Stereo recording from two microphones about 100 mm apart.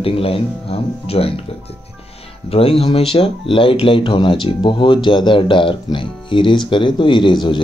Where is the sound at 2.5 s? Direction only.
75° left (ahead or behind).